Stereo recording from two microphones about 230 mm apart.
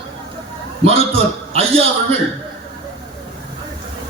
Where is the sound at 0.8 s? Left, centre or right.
Right.